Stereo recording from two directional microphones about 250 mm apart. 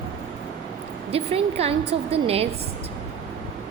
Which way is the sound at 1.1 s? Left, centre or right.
Right.